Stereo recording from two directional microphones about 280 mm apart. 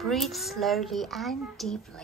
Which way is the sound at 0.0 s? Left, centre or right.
Centre.